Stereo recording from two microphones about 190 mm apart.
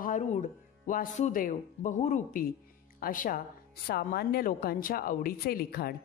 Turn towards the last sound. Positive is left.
turn(degrees=55)  # may be behind; listen again after turning